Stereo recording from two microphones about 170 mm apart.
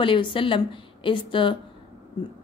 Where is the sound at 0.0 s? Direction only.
30° left (ahead or behind).